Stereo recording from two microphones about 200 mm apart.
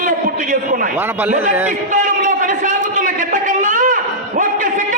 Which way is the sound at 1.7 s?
40° right (ahead or behind).